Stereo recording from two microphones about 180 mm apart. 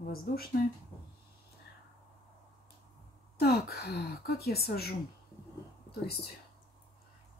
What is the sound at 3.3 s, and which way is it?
Speech, 60° left (ahead or behind).